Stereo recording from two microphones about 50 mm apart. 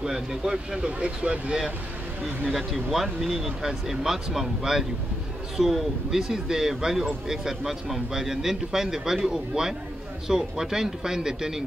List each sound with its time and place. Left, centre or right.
0.0 s speech: centre
2.4 s speech: centre